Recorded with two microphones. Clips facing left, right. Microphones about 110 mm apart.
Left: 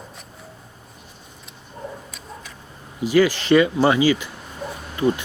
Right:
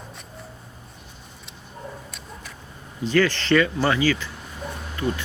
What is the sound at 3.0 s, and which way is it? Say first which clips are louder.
Speech: left 4 dB; 10° left (ahead or behind).